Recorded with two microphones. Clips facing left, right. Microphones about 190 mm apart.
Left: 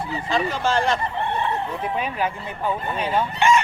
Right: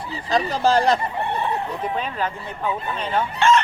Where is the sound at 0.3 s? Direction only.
40° right (ahead or behind).